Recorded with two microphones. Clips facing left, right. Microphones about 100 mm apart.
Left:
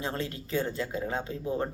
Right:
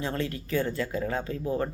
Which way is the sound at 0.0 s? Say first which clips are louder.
Right 3 dB; 25° left (ahead or behind).